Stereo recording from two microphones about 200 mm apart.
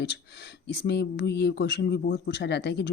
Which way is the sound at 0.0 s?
55° left (ahead or behind).